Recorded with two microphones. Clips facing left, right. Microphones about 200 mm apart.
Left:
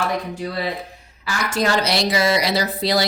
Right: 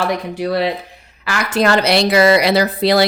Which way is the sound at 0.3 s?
75° right (ahead or behind).